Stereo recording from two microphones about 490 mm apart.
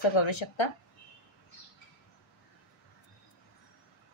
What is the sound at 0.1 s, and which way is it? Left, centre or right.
Speech, left.